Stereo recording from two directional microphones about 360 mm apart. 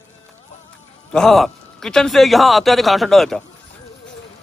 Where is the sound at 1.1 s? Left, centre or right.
Centre.